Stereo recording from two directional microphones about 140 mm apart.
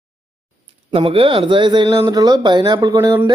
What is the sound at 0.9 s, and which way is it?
Speech, 40° right (ahead or behind).